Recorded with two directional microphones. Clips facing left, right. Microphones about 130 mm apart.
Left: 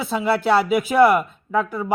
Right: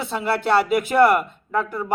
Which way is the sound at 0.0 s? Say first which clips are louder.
Left 3 dB; 5° left (ahead or behind).